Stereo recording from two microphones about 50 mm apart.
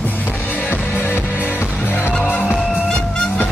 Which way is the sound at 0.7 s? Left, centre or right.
Left.